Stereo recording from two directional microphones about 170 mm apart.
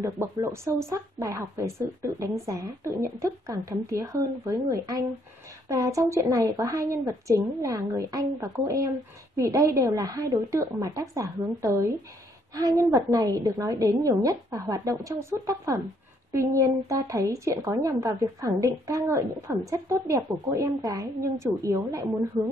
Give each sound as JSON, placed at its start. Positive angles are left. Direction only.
{"t": 0.0, "sound": "a woman's voice", "side_deg": -20}